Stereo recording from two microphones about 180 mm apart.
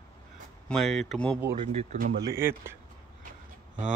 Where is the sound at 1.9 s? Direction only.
55° right (ahead or behind).